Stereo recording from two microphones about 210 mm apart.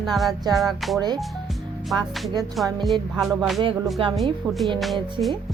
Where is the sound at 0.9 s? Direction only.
20° right (ahead or behind).